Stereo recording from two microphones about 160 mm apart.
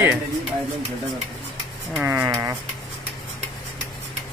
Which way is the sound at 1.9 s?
10° right (ahead or behind).